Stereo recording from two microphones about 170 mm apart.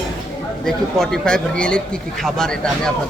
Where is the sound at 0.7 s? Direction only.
Centre (ahead or behind).